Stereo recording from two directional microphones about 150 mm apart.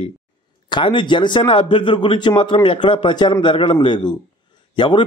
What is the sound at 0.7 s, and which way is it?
A man's voice, 30° left (ahead or behind).